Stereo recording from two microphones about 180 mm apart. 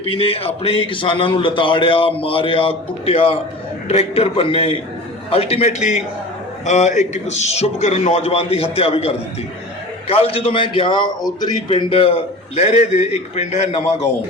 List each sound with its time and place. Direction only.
0.0 s a man's voice: 30° left (ahead or behind)